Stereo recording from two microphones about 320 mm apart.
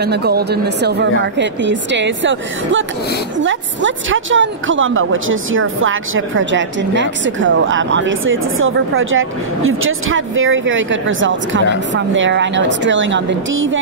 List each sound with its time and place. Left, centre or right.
0.0 s a woman's voice: right